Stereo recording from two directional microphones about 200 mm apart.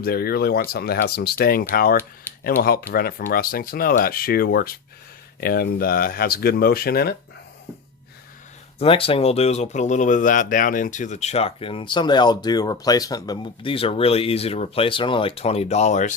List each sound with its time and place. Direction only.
0.0 s speech: 50° left (ahead or behind)
8.8 s speech: 30° left (ahead or behind)